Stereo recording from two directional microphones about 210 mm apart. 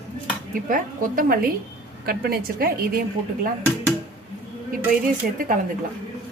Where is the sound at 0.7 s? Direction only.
40° right (ahead or behind).